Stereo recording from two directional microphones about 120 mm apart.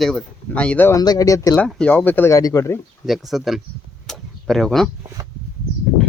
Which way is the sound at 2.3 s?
25° left (ahead or behind).